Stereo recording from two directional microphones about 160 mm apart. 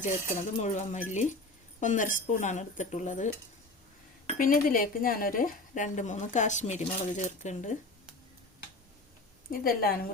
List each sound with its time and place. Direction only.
0.0 s speech: 50° left (ahead or behind)
4.4 s speech: 60° left (ahead or behind)
9.5 s a woman's voice: 65° left (ahead or behind)